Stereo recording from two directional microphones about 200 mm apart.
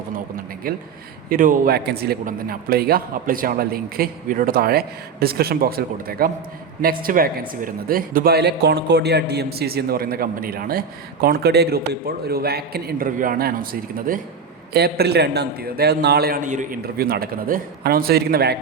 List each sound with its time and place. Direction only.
0.7 s a man's voice: 45° right (ahead or behind)